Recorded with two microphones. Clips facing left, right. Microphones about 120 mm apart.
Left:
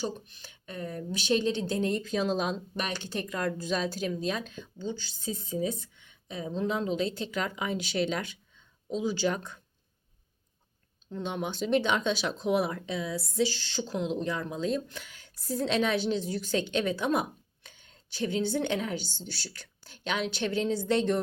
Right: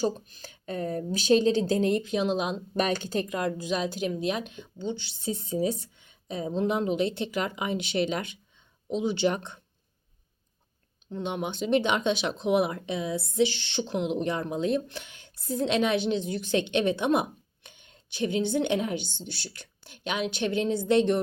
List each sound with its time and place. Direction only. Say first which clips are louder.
0.0 s speech: right 6 dB; 40° right (ahead or behind)
2.0 s speech: right 2 dB; 10° right (ahead or behind)
11.1 s a woman's voice: right 2 dB; 15° right (ahead or behind)